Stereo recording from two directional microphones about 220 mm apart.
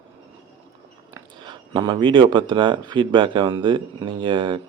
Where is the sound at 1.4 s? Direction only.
20° right (ahead or behind).